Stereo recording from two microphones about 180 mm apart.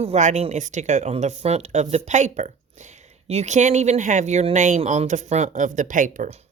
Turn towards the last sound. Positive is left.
turn(degrees=-40)  # may be behind; listen again after turning